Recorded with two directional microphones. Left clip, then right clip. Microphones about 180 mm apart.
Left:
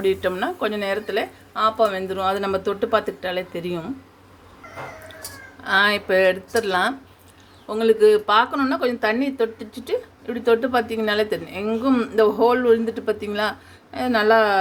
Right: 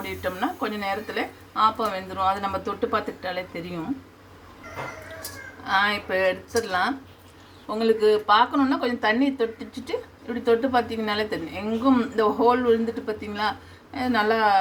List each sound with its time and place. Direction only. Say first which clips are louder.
0.0 s speech: left 7 dB; 50° left (ahead or behind)
5.6 s speech: left 4 dB; 50° left (ahead or behind)